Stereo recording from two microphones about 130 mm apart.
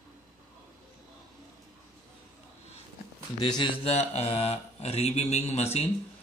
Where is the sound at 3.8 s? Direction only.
50° left (ahead or behind).